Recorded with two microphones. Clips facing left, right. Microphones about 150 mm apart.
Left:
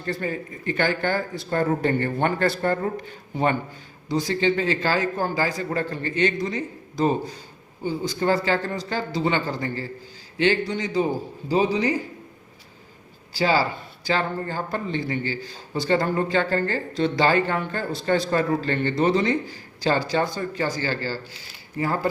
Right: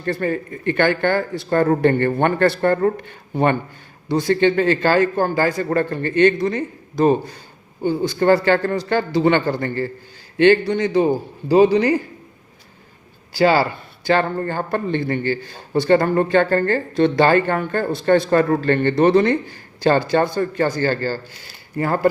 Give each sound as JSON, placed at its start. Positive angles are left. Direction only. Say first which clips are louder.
{"t": 0.0, "sound": "a man's voice", "louder": "right 6 dB", "side_deg": -60}
{"t": 13.3, "sound": "a man's voice", "louder": "right 6 dB", "side_deg": -65}